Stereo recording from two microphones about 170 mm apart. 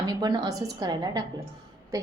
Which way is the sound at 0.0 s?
25° right (ahead or behind).